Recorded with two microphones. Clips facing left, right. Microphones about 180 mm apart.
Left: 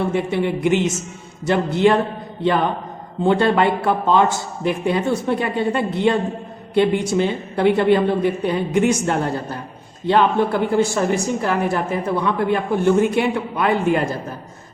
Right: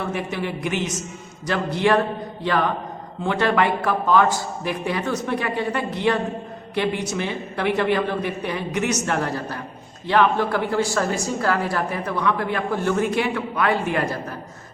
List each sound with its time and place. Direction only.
0.0 s a woman's voice: 25° left (ahead or behind)